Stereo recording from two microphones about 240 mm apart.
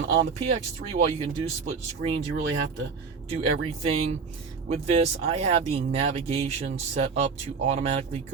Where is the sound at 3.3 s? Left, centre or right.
Right.